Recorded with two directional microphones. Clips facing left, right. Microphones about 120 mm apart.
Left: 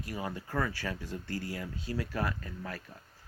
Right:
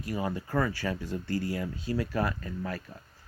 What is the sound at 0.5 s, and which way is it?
Speech, 15° right (ahead or behind).